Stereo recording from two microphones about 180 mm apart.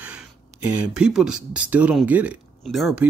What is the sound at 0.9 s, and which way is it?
Speech, 5° right (ahead or behind).